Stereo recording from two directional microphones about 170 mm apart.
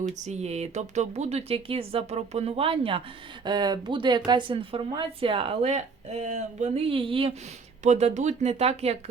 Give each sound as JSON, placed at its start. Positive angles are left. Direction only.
{"t": 0.3, "sound": "speech", "side_deg": -40}
{"t": 7.9, "sound": "speech", "side_deg": -40}